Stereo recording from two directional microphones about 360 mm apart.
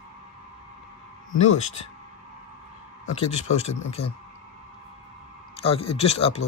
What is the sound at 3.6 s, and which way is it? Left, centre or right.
Speech, centre.